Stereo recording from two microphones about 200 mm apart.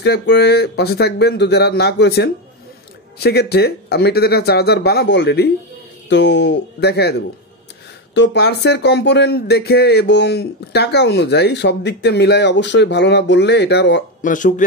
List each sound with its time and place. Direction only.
0.0 s speech: 55° left (ahead or behind)
14.2 s speech: 40° left (ahead or behind)